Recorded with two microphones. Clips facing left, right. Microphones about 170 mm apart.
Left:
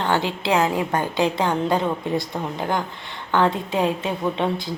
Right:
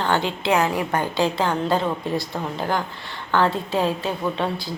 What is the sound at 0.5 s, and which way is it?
A woman's voice, 20° left (ahead or behind).